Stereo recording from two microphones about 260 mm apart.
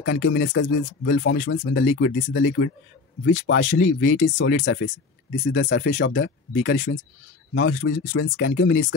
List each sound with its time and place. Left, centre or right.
0.0 s speech: left
3.6 s speech: left
4.4 s speech: left